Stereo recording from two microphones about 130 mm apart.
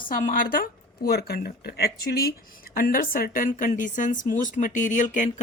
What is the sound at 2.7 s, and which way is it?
Speech, 90° left.